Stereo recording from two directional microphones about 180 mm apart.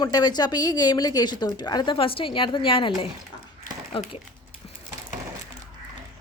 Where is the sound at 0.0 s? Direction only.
20° left (ahead or behind).